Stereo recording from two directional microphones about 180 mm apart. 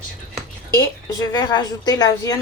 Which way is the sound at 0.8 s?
20° left (ahead or behind).